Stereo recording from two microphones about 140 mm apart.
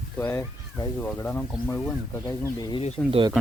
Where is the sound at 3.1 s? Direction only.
35° right (ahead or behind).